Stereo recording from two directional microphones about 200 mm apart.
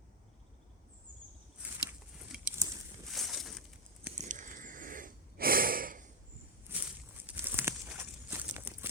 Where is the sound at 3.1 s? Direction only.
Centre (ahead or behind).